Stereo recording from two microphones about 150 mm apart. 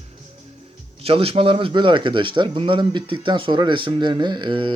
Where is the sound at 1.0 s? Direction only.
40° right (ahead or behind).